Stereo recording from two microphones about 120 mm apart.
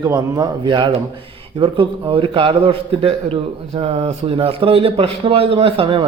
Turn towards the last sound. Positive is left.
turn(degrees=-45)  # may be behind; listen again after turning